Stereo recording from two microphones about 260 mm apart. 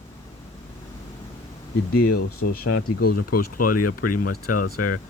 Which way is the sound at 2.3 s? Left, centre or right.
Left.